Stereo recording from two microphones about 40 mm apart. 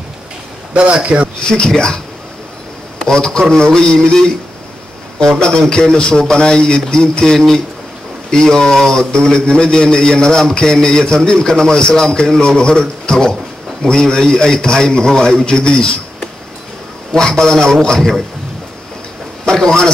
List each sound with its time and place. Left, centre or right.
1.0 s speech: right
3.1 s a man's voice: centre
17.1 s a man's voice: centre
19.4 s speech: centre